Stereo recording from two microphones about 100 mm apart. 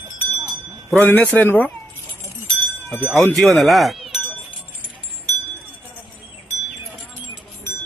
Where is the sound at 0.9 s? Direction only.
15° left (ahead or behind).